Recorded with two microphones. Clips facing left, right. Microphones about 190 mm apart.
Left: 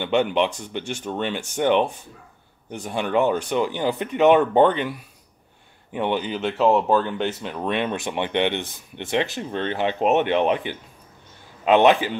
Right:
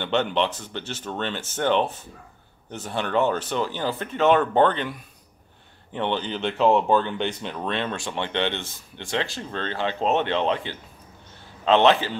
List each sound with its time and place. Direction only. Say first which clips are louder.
0.0 s speech: left 3 dB; 10° left (ahead or behind)